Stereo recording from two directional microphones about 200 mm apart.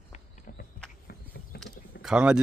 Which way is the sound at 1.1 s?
55° left (ahead or behind).